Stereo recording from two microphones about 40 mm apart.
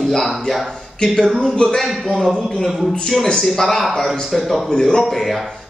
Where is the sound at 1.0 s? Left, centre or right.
Left.